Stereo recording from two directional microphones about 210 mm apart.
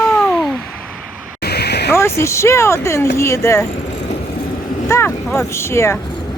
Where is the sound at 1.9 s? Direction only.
15° left (ahead or behind).